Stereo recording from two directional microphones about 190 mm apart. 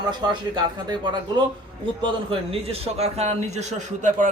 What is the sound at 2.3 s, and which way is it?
A man's voice, 30° right (ahead or behind).